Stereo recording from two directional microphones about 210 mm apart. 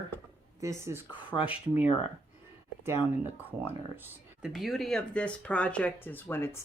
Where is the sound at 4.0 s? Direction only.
5° right (ahead or behind).